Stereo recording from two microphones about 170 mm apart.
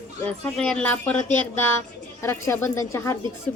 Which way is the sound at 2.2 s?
15° left (ahead or behind).